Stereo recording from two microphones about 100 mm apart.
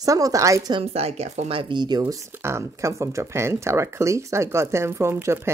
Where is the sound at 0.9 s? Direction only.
90° right; by 2.1 s 45° right (ahead or behind).